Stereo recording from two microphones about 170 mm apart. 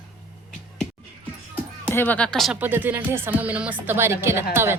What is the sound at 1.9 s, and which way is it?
Speech, 10° left (ahead or behind).